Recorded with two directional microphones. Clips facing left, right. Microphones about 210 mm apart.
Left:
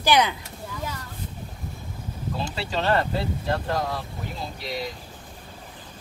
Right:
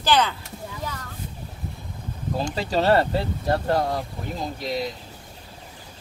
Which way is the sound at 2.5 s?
40° right (ahead or behind).